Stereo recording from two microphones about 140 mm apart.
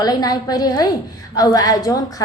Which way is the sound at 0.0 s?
25° left (ahead or behind).